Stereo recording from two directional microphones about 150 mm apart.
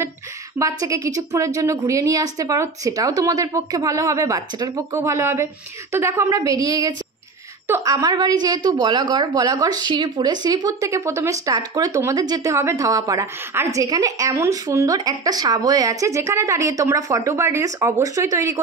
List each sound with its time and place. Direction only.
0.6 s a woman's voice: 20° right (ahead or behind)